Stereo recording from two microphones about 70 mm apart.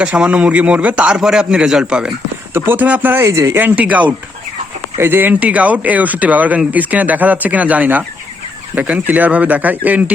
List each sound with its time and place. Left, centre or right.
0.0 s a man's voice: centre
2.5 s speech: right
2.7 s speech: right
3.2 s speech: right
3.6 s speech: right